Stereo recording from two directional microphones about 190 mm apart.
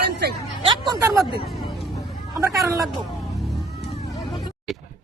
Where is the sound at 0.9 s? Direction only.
20° right (ahead or behind).